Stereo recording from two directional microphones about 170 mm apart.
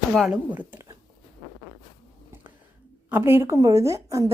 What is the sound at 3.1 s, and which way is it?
A woman's voice, 15° right (ahead or behind).